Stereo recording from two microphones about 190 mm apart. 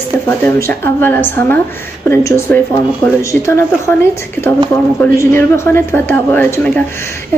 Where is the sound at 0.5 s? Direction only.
10° left (ahead or behind).